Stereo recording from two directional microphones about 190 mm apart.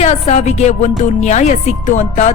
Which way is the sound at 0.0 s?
35° left (ahead or behind).